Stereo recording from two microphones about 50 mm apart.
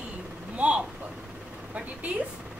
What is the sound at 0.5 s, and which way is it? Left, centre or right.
Vehicle, right.